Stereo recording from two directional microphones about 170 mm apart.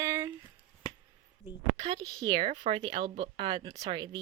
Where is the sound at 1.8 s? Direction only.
25° right (ahead or behind).